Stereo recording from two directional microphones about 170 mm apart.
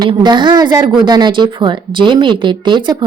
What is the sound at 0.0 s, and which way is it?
Speech, 25° right (ahead or behind).